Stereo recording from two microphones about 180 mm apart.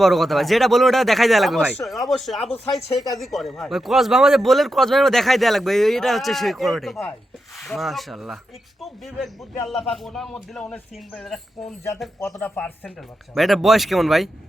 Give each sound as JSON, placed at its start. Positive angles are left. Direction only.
{"t": 0.0, "sound": "a man's voice", "side_deg": 0}
{"t": 2.9, "sound": "speech", "side_deg": 20}
{"t": 3.2, "sound": "a man's voice", "side_deg": 0}
{"t": 12.2, "sound": "a man's voice", "side_deg": 10}